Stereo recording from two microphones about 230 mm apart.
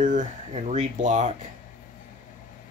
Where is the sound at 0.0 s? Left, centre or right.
Right.